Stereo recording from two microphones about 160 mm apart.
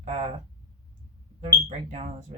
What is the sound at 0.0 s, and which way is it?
Speech, 40° right (ahead or behind).